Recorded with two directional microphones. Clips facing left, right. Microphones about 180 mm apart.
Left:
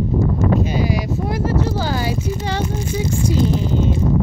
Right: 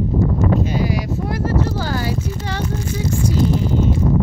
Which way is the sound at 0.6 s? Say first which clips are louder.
Even; 20° left (ahead or behind).